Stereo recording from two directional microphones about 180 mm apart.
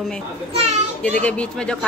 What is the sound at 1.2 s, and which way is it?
Speech, 5° left (ahead or behind).